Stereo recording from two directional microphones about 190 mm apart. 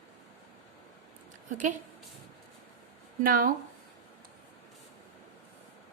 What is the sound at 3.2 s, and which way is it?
Speech, 50° right (ahead or behind).